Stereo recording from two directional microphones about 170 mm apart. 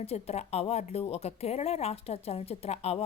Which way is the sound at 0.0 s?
35° left (ahead or behind).